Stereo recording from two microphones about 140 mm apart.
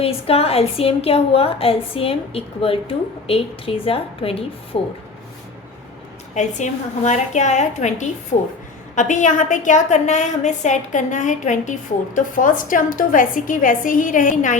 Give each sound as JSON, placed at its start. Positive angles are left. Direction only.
{"t": 0.0, "sound": "a woman's voice", "side_deg": 45}
{"t": 6.3, "sound": "a woman's voice", "side_deg": 60}